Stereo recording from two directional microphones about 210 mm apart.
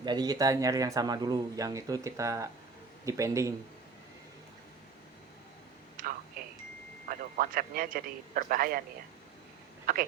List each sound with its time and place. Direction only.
0.0 s speech: 20° right (ahead or behind)
6.0 s telephone: 40° right (ahead or behind)
7.1 s a man's voice: 40° right (ahead or behind)
9.8 s speech: 40° right (ahead or behind)